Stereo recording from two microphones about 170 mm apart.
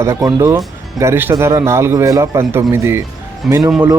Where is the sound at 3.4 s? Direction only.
Centre (ahead or behind).